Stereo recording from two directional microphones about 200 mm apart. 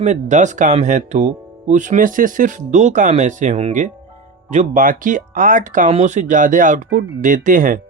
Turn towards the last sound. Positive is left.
turn(degrees=-40)  # may be behind; listen again after turning